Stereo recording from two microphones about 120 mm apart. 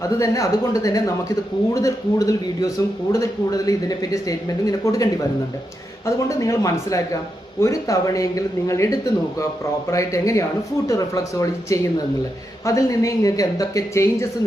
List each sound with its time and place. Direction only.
0.0 s speech: 25° left (ahead or behind)
6.1 s speech: 25° left (ahead or behind)